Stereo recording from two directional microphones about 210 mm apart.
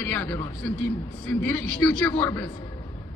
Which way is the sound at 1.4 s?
10° left (ahead or behind).